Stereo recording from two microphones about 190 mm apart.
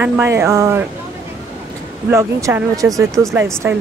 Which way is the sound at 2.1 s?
15° right (ahead or behind).